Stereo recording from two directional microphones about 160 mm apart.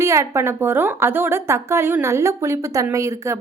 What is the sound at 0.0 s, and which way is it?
A woman's voice, 20° right (ahead or behind).